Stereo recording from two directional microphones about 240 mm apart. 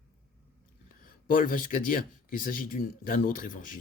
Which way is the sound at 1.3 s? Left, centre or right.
Left.